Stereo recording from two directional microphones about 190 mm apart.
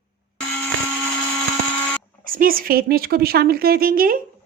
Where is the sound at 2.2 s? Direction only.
50° right (ahead or behind).